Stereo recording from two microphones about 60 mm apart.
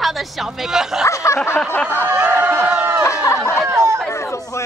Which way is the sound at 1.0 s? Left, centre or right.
Left.